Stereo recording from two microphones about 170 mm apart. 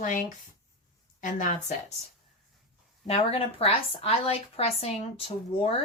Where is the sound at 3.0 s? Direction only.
35° left (ahead or behind).